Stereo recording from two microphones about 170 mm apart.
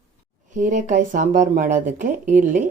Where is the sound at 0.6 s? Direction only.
45° right (ahead or behind).